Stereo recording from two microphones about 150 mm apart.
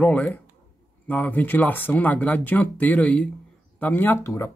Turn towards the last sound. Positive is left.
turn(degrees=20)  # may be behind; listen again after turning